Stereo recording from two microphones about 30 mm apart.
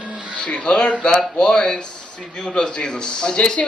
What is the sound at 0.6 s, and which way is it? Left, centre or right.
A man's voice, left.